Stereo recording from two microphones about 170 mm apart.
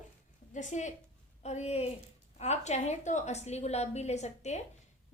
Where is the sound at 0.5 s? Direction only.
45° left (ahead or behind).